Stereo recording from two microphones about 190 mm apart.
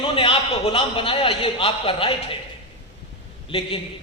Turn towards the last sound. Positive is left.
turn(degrees=30)  # may be behind; listen again after turning